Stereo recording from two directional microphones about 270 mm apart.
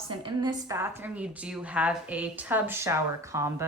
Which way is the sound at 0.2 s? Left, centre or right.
Centre.